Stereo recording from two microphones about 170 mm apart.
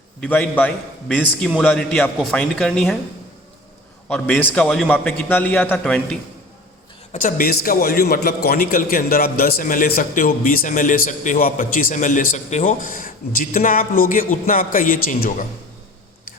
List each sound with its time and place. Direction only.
0.2 s a man's voice: 10° left (ahead or behind)
4.1 s a man's voice: 10° left (ahead or behind)
7.1 s a man's voice: 50° left (ahead or behind)